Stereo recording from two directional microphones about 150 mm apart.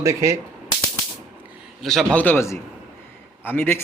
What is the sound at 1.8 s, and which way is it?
A man's voice, centre (ahead or behind).